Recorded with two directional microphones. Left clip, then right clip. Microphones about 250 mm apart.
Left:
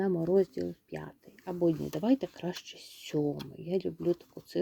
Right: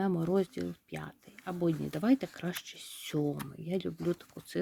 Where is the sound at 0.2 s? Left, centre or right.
Centre.